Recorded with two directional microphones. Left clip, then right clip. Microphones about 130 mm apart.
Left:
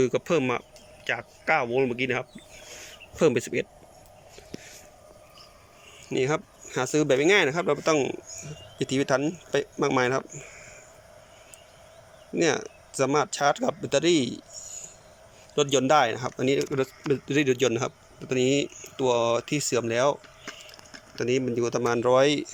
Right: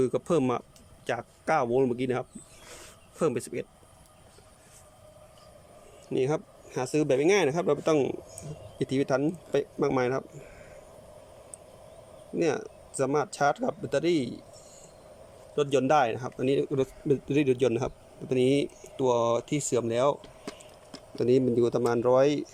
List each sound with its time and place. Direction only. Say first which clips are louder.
0.0 s speech: left 2 dB; 25° right (ahead or behind)
3.2 s speech: left 6 dB; 5° right (ahead or behind)
6.1 s speech: left 2 dB; 20° right (ahead or behind)
12.4 s speech: left 3 dB; 15° right (ahead or behind)
21.2 s speech: right 2 dB; 30° right (ahead or behind)
21.9 s speech: left 3 dB; 15° right (ahead or behind)